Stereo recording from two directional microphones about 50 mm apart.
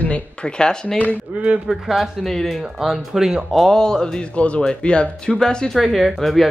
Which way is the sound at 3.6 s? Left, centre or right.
Centre.